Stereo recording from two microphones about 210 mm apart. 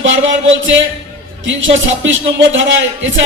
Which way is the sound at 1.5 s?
65° right (ahead or behind).